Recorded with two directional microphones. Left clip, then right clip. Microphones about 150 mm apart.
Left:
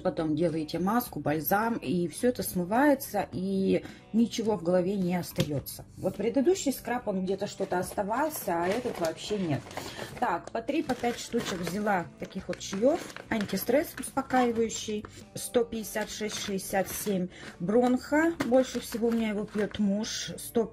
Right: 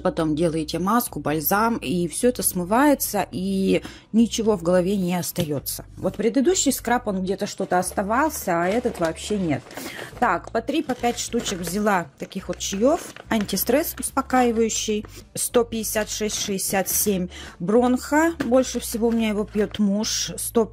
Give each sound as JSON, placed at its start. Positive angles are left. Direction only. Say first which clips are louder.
{"t": 0.0, "sound": "speech", "louder": "right 6 dB", "side_deg": -50}
{"t": 6.1, "sound": "speech", "louder": "right 6 dB", "side_deg": -60}
{"t": 10.2, "sound": "a woman's voice", "louder": "right 9 dB", "side_deg": -90}
{"t": 10.7, "sound": "speech", "louder": "right 4 dB", "side_deg": -40}